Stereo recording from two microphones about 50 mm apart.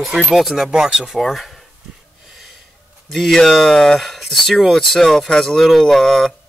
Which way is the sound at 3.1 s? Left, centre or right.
Centre.